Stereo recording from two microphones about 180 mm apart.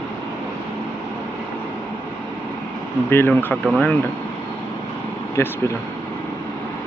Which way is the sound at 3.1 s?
10° left (ahead or behind).